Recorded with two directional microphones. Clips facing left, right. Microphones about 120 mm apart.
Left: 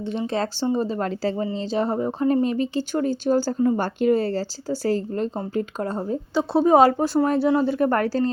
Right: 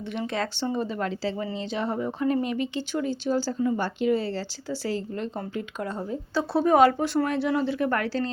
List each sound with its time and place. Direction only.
0.1 s speech: 30° left (ahead or behind)
6.3 s speech: 25° left (ahead or behind)